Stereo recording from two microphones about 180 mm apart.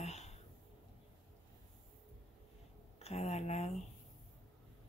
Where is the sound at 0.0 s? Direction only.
40° left (ahead or behind).